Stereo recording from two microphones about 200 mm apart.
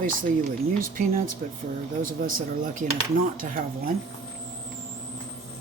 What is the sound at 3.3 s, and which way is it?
Speech, 45° right (ahead or behind).